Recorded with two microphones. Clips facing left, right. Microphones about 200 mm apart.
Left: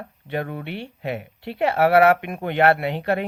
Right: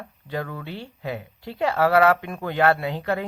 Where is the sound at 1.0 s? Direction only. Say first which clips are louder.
Left 1 dB; 25° left (ahead or behind).